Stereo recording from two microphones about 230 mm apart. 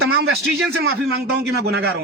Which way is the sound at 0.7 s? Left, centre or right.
Right.